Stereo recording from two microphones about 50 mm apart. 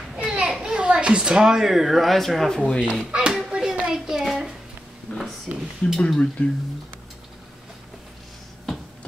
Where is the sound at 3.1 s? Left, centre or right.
Centre.